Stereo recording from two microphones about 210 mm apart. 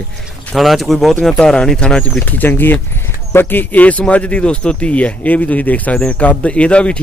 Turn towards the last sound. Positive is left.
turn(degrees=5)  # may be behind; listen again after turning